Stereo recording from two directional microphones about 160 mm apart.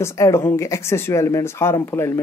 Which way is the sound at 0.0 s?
20° left (ahead or behind).